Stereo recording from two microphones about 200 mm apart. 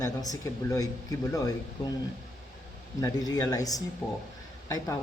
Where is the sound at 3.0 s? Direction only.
20° left (ahead or behind).